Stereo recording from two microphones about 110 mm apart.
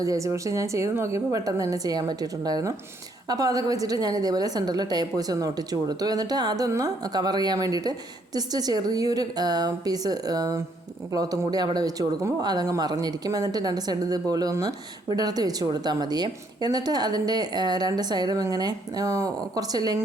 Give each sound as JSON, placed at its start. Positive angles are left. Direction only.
{"t": 0.0, "sound": "a woman's voice", "side_deg": -30}